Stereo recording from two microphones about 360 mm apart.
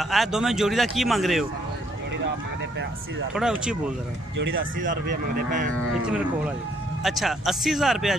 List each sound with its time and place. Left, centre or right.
0.0 s speech: centre
3.3 s speech: centre
4.4 s speech: right
6.0 s speech: centre